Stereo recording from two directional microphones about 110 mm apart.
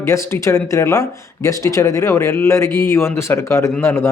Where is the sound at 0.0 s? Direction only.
25° left (ahead or behind).